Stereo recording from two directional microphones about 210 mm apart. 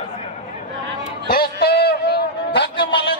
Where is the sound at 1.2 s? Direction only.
45° left (ahead or behind).